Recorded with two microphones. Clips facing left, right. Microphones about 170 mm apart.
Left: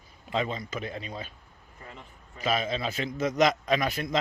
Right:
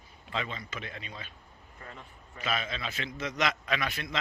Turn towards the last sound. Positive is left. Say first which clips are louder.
# left 6 dB
turn(degrees=45)  # may be behind; listen again after turning